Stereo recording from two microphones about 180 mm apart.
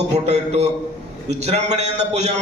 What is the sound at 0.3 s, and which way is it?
A man's voice, 40° right (ahead or behind).